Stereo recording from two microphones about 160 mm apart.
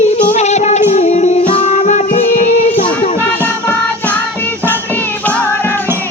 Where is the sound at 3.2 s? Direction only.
15° left (ahead or behind).